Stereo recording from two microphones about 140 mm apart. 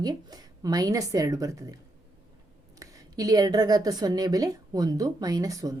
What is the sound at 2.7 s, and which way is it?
Speech, 25° right (ahead or behind).